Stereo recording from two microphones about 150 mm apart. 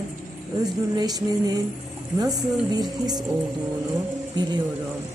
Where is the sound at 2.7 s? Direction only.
25° right (ahead or behind).